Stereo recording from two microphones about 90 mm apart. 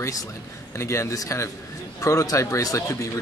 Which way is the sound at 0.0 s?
40° left (ahead or behind).